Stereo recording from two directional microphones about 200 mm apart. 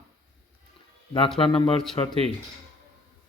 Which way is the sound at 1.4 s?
30° left (ahead or behind).